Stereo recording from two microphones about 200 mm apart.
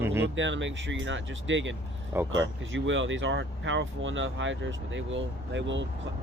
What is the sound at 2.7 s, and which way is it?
Speech, 70° right (ahead or behind).